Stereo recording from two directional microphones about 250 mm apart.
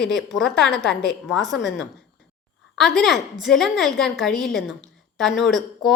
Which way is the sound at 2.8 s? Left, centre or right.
Centre.